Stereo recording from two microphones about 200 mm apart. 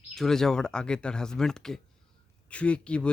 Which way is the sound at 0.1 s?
Centre (ahead or behind).